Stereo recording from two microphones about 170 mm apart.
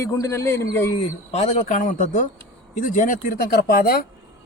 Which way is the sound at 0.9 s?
40° left (ahead or behind).